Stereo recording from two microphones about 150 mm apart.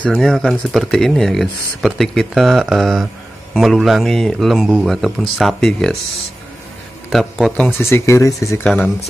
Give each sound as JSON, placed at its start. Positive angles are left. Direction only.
{"t": 0.0, "sound": "speech", "side_deg": 5}
{"t": 7.1, "sound": "speech", "side_deg": 0}
{"t": 7.8, "sound": "speech", "side_deg": 20}
{"t": 8.6, "sound": "speech", "side_deg": 5}